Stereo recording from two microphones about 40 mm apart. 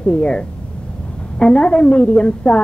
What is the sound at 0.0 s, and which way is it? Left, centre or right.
A woman's voice, left.